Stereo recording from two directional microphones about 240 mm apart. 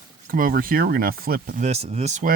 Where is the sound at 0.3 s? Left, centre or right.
Right.